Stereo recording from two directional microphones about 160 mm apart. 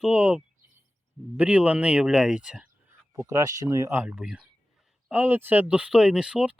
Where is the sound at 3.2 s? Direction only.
15° right (ahead or behind).